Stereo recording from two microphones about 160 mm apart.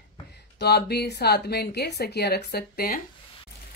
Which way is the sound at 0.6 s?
90° left.